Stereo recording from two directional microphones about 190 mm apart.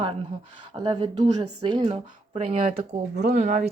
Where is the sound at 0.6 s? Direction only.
25° right (ahead or behind).